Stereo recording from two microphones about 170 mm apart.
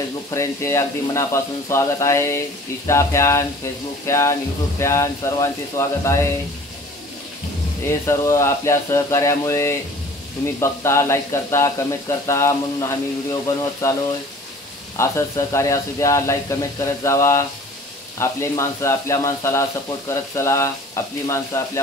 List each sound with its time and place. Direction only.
0.3 s speech: 15° left (ahead or behind)
7.8 s speech: 15° left (ahead or behind)
15.0 s speech: 15° left (ahead or behind)